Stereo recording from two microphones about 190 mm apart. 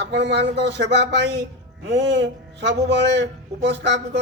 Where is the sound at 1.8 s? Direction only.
70° right (ahead or behind).